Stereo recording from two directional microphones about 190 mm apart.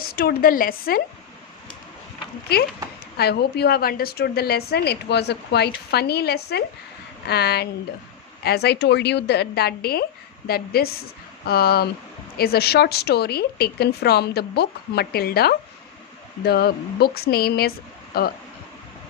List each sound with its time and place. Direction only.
0.0 s a woman's voice: 50° left (ahead or behind)
3.2 s a woman's voice: 60° left (ahead or behind)